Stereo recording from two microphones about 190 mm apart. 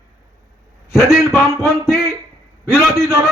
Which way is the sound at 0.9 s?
Centre (ahead or behind).